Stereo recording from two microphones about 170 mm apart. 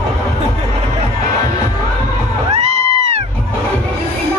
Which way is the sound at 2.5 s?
40° right (ahead or behind).